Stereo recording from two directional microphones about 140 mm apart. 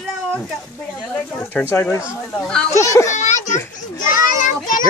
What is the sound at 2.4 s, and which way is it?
Speech, 5° left (ahead or behind).